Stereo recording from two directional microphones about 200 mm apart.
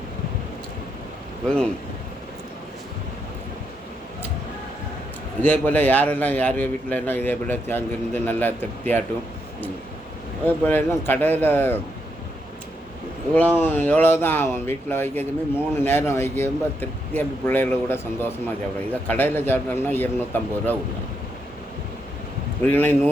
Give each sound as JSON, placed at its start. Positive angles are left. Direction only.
{"t": 1.5, "sound": "speech", "side_deg": 5}
{"t": 5.4, "sound": "speech", "side_deg": 10}
{"t": 10.4, "sound": "speech", "side_deg": 10}
{"t": 13.3, "sound": "speech", "side_deg": 10}
{"t": 22.6, "sound": "speech", "side_deg": 10}